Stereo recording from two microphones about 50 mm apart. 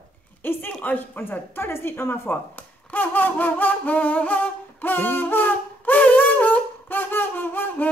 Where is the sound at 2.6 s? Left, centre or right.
Left.